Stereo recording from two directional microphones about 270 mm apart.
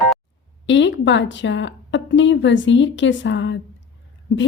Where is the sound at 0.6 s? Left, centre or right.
Left.